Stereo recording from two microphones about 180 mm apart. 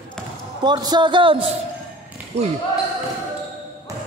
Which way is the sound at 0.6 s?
25° right (ahead or behind).